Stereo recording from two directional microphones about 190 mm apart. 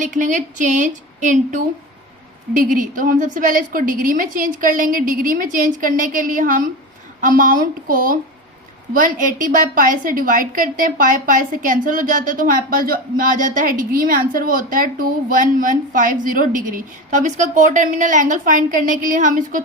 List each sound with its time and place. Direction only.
0.0 s a woman's voice: 40° right (ahead or behind)